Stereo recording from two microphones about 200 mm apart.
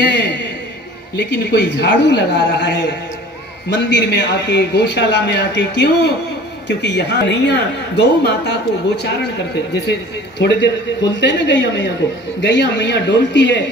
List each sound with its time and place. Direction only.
0.0 s a sound: 55° left (ahead or behind)
1.1 s a woman's voice: 60° left (ahead or behind)
10.4 s a woman's voice: 60° left (ahead or behind)